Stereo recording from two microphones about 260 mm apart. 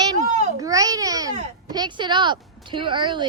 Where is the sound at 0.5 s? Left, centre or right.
Centre.